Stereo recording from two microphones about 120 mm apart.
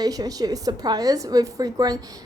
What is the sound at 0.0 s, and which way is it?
A woman's voice, 30° right (ahead or behind).